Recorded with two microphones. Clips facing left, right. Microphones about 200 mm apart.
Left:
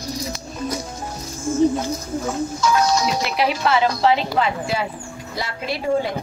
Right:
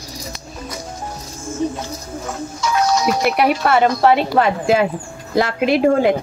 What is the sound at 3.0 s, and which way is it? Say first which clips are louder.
A woman's voice: right 5 dB; 55° right (ahead or behind).